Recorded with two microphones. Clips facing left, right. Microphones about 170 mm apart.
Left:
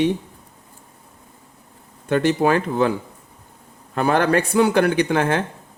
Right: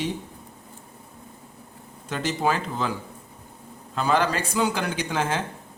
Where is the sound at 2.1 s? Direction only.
60° left (ahead or behind).